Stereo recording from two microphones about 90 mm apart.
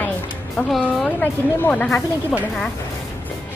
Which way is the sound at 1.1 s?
15° left (ahead or behind).